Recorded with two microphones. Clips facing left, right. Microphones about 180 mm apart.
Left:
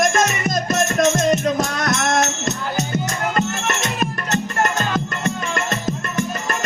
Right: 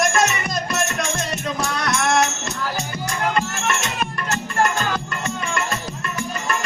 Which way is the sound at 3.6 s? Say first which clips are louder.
Left 2 dB; 40° left (ahead or behind).